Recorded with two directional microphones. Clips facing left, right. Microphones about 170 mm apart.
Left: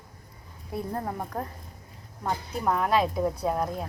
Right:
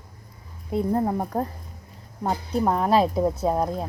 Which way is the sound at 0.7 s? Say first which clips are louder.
Right 8 dB; 25° right (ahead or behind).